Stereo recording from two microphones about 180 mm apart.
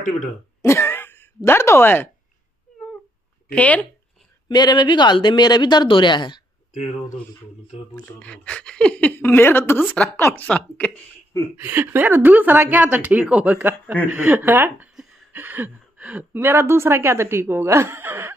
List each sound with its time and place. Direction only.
0.6 s cough: 15° left (ahead or behind)
3.4 s speech: 10° left (ahead or behind)
4.5 s speech: 25° left (ahead or behind)
7.9 s speech: 5° left (ahead or behind)
11.5 s speech: 10° right (ahead or behind)